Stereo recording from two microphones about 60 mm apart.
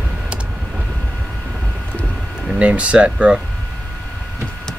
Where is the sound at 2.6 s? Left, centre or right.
Right.